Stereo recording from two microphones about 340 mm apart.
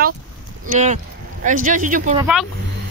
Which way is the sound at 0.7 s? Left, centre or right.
Right.